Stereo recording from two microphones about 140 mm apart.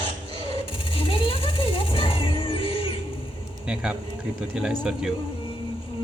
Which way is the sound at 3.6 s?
5° right (ahead or behind).